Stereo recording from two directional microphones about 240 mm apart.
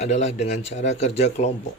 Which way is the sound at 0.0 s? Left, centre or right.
Left.